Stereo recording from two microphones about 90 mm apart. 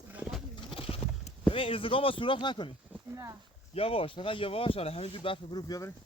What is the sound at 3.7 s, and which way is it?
Speech, 90° left.